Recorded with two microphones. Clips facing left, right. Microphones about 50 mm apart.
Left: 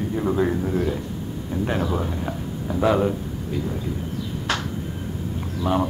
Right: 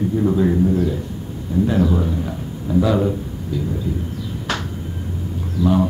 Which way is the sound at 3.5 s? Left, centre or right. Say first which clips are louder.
Right 3 dB; left.